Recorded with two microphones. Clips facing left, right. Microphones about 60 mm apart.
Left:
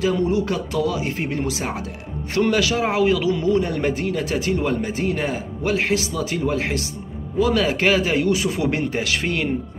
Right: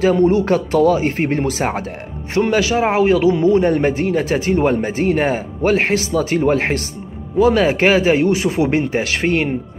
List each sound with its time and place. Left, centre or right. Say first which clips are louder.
0.0 s speech: right 6 dB; right
2.3 s a man's voice: right 4 dB; right